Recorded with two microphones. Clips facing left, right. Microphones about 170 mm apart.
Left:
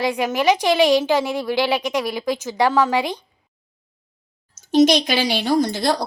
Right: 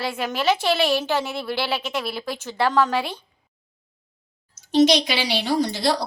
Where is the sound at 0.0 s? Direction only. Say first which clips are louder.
Left 5 dB; 15° left (ahead or behind).